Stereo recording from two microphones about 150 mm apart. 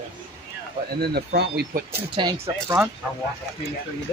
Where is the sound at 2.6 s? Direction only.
15° right (ahead or behind).